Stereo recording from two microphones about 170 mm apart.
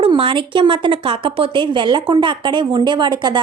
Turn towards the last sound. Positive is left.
turn(degrees=-25)  # may be behind; listen again after turning